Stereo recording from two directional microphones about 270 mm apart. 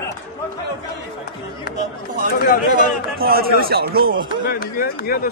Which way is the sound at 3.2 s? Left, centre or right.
Right.